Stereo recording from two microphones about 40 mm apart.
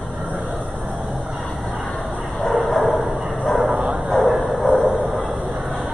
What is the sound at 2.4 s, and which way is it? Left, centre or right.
Bow-wow, centre.